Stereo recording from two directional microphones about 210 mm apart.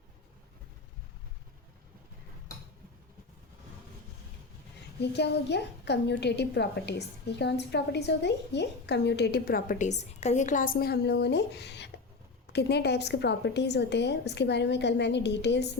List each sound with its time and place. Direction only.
4.9 s a woman's voice: 55° left (ahead or behind)